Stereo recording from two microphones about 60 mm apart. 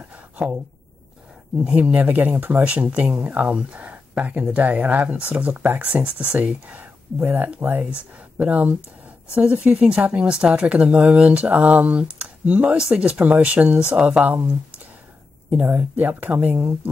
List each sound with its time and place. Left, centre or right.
1.6 s speech: right
2.6 s speech: right
15.6 s speech: right